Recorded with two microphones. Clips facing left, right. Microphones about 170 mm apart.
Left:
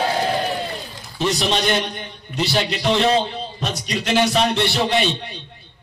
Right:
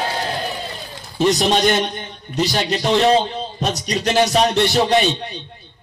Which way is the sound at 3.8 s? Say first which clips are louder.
Right 1 dB; 40° right (ahead or behind).